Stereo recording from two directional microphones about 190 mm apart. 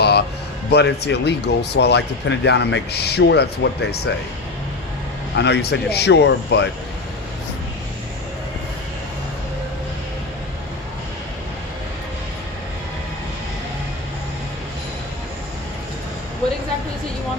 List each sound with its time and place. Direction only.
0.0 s a sound: 60° left (ahead or behind)
0.7 s speech: 60° left (ahead or behind)
5.4 s speech: 60° left (ahead or behind)